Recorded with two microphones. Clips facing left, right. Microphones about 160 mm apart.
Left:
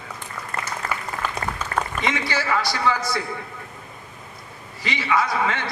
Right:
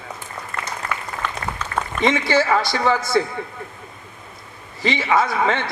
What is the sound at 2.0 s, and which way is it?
A man's voice, 25° right (ahead or behind).